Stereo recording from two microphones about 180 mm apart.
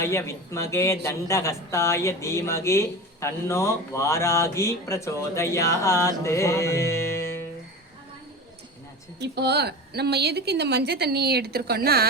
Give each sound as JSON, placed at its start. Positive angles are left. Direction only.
{"t": 0.0, "sound": "speech", "side_deg": 15}
{"t": 9.1, "sound": "a woman's voice", "side_deg": -70}